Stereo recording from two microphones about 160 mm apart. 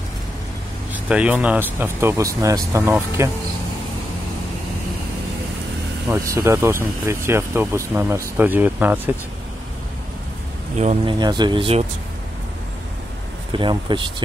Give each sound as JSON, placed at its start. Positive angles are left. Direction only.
{"t": 1.0, "sound": "speech", "side_deg": -10}
{"t": 6.0, "sound": "speech", "side_deg": -20}
{"t": 10.8, "sound": "speech", "side_deg": -40}
{"t": 11.1, "sound": "speech", "side_deg": -25}
{"t": 13.5, "sound": "speech", "side_deg": -30}